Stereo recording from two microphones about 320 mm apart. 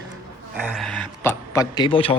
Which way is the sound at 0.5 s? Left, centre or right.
Centre.